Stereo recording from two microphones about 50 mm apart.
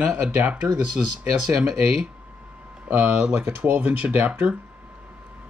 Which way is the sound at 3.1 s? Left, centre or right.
Centre.